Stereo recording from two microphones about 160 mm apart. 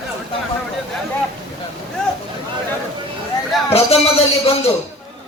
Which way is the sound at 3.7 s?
40° left (ahead or behind).